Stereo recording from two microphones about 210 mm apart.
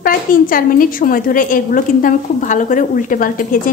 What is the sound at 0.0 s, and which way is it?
A woman's voice, 45° left (ahead or behind).